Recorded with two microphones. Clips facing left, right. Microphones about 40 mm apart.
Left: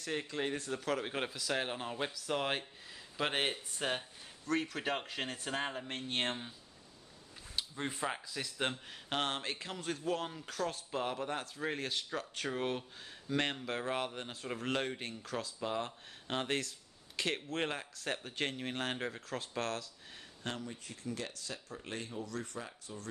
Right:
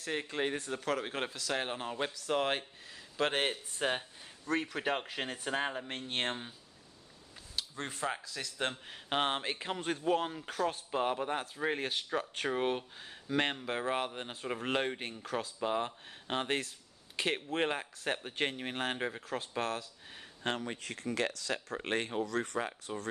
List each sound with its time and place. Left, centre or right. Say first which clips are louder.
0.0 s a man's voice: right 2 dB; centre
0.3 s speech: right 4 dB; right
0.6 s a man's voice: right 1 dB; centre
7.5 s speech: left 1 dB; centre
8.8 s a man's voice: right 4 dB; centre
20.6 s speech: right 5 dB; right